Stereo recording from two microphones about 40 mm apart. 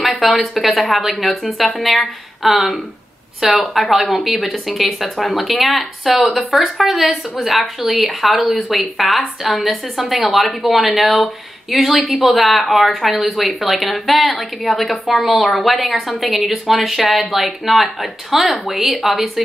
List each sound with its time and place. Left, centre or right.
0.2 s speech: centre